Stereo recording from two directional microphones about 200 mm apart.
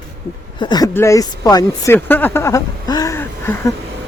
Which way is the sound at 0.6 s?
20° left (ahead or behind).